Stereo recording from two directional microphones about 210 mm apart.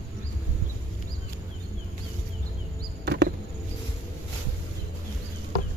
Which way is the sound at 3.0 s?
55° right (ahead or behind).